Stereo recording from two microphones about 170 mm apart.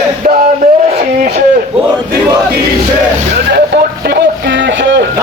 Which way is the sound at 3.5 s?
75° right (ahead or behind).